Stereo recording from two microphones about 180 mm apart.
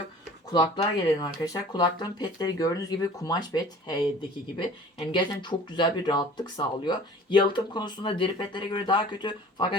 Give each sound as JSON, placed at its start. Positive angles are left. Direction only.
{"t": 0.5, "sound": "speech", "side_deg": 20}
{"t": 5.1, "sound": "speech", "side_deg": 25}